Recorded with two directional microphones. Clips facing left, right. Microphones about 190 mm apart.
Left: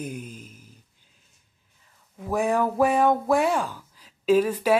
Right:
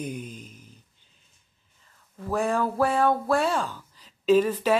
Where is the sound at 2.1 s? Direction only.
15° left (ahead or behind).